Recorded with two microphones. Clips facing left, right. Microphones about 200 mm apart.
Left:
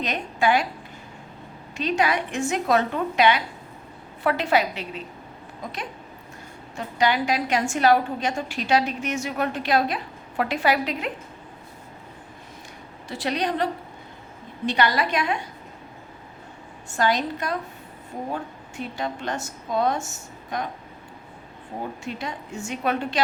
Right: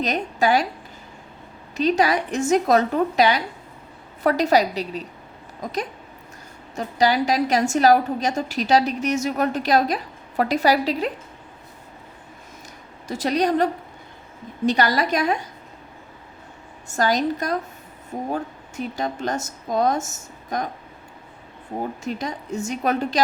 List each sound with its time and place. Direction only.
0.0 s a woman's voice: 40° right (ahead or behind)
1.7 s a woman's voice: 40° right (ahead or behind)
13.1 s a woman's voice: 45° right (ahead or behind)
14.7 s a woman's voice: 40° right (ahead or behind)
16.9 s a woman's voice: 40° right (ahead or behind)
18.8 s a woman's voice: 40° right (ahead or behind)
22.0 s a woman's voice: 40° right (ahead or behind)